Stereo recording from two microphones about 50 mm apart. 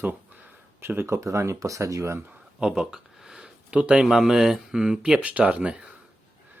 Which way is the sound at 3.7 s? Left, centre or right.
Right.